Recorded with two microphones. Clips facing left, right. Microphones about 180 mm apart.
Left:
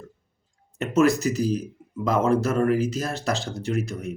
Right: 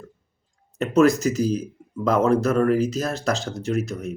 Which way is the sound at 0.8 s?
40° right (ahead or behind).